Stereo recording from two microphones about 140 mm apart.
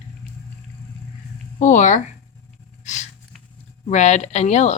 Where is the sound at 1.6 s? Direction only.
60° left (ahead or behind).